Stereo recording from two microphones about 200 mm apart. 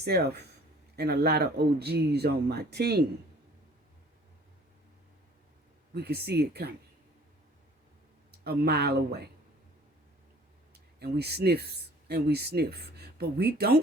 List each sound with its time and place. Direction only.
0.0 s speech: 55° right (ahead or behind)
5.9 s speech: 55° right (ahead or behind)
8.4 s speech: 50° right (ahead or behind)
11.0 s speech: 50° right (ahead or behind)